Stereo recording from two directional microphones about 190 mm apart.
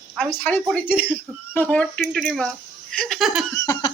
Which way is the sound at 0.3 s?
10° left (ahead or behind).